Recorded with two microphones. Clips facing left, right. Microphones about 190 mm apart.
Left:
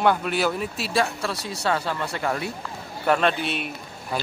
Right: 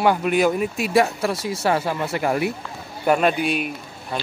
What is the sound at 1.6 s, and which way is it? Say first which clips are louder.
A man's voice: right 3 dB; 20° right (ahead or behind).